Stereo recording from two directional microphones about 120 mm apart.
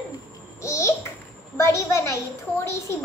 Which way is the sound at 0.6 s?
25° left (ahead or behind).